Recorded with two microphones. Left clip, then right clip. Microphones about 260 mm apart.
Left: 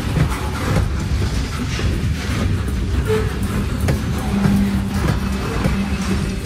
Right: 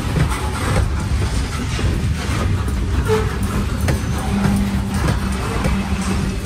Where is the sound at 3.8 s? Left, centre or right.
Right.